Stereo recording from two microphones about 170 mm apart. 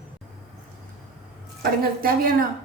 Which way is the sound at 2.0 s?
60° right (ahead or behind).